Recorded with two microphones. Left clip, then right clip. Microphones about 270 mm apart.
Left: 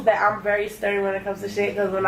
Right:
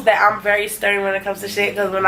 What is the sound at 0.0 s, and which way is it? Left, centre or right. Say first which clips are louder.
Speech: right 5 dB; centre.